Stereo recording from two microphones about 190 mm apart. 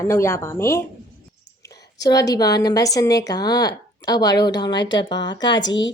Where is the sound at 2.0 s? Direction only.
20° left (ahead or behind).